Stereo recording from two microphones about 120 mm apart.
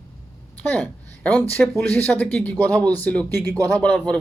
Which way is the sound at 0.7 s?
10° left (ahead or behind).